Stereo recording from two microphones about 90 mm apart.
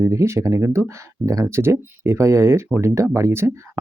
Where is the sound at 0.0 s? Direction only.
35° right (ahead or behind).